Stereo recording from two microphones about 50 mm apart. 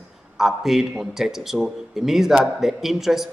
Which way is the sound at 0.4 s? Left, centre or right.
Centre.